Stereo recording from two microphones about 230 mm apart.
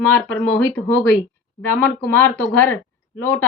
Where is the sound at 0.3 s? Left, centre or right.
Left.